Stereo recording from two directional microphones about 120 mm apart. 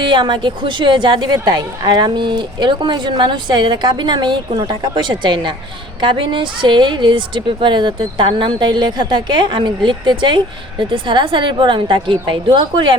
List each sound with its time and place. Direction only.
0.0 s a woman's voice: 40° right (ahead or behind)